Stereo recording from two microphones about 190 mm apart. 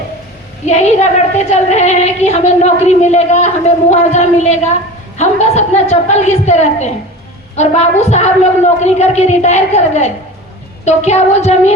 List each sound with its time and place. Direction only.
0.6 s a woman's voice: 35° left (ahead or behind)